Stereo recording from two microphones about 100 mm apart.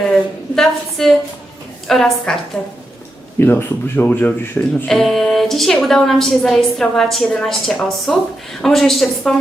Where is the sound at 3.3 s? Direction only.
20° left (ahead or behind).